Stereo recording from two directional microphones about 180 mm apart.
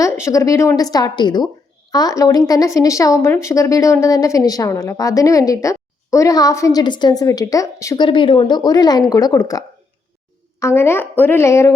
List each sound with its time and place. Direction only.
0.0 s a woman's voice: 15° left (ahead or behind)